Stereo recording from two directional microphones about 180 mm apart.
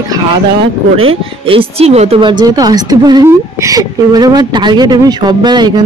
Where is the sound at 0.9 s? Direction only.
30° right (ahead or behind).